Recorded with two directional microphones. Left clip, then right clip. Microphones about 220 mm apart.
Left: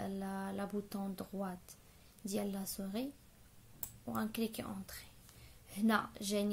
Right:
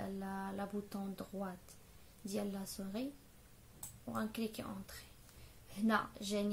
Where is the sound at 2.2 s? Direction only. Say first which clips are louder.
Left 2 dB; 35° left (ahead or behind).